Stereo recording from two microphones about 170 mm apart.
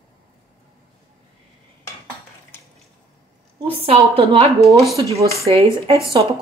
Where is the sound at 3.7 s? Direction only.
35° right (ahead or behind).